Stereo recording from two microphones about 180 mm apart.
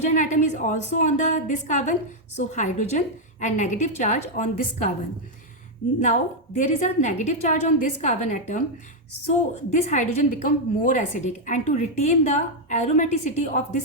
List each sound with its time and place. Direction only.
0.0 s a woman's voice: 40° left (ahead or behind)
6.0 s a woman's voice: 40° left (ahead or behind)
9.6 s a woman's voice: 40° left (ahead or behind)